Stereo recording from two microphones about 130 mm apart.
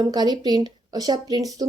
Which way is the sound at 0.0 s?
35° right (ahead or behind).